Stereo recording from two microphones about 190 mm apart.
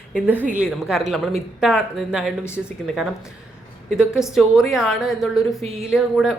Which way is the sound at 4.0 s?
5° right (ahead or behind).